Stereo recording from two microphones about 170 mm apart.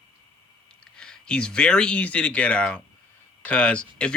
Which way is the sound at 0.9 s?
5° left (ahead or behind).